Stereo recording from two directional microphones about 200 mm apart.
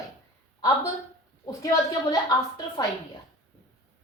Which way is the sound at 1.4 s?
15° left (ahead or behind).